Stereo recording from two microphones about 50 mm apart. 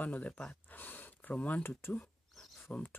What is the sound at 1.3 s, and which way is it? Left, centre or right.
Speech, left.